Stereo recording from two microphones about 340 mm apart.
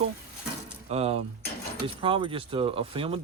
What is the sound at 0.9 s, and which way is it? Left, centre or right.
Speech, centre.